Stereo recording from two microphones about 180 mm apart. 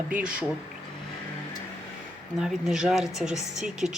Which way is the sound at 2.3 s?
Centre (ahead or behind).